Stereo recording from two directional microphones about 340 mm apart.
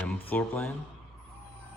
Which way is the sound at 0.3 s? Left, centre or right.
Centre.